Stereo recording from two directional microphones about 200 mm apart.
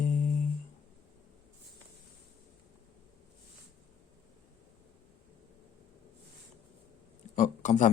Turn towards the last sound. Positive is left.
turn(degrees=35)  # may be behind; listen again after turning